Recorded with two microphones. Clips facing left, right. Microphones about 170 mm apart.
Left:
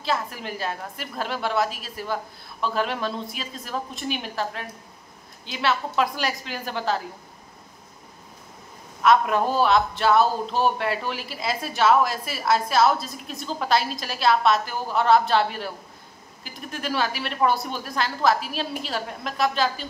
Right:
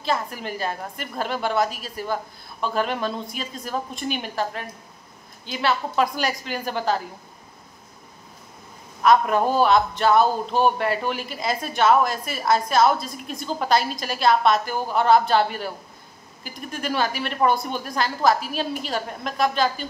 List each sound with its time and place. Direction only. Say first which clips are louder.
0.0 s a woman's voice: right 1 dB; centre (ahead or behind)
9.0 s a woman's voice: right 1 dB; centre (ahead or behind)